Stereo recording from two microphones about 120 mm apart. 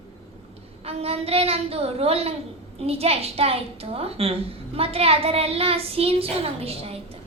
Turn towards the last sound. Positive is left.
turn(degrees=-55)  # may be behind; listen again after turning